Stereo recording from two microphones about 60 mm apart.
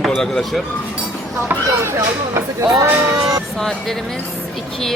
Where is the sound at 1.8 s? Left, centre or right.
Right.